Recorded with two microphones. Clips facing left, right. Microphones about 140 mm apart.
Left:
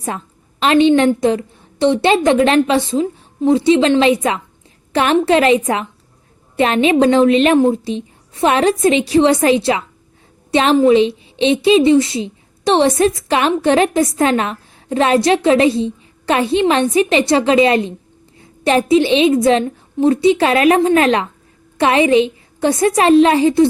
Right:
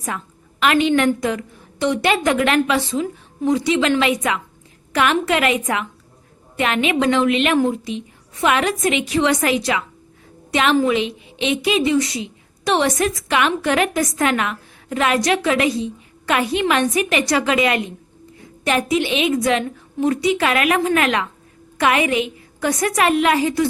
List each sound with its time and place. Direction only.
0.6 s a woman's voice: 30° left (ahead or behind)